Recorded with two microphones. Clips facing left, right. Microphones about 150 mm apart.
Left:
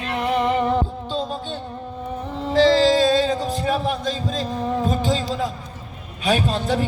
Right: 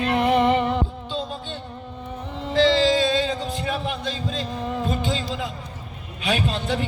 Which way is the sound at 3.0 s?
40° left (ahead or behind).